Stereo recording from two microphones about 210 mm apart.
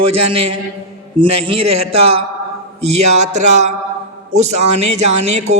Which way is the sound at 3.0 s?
35° right (ahead or behind).